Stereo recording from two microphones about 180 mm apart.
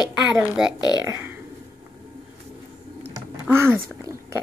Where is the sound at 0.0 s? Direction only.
5° right (ahead or behind).